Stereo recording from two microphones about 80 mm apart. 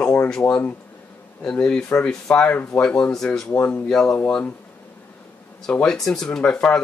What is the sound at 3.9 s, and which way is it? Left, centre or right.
Speech, centre.